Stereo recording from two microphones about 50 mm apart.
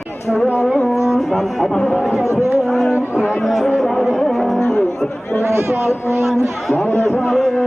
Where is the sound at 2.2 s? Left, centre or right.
Left.